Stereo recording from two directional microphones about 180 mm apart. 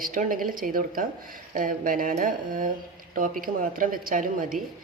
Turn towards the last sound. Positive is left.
turn(degrees=-50)  # may be behind; listen again after turning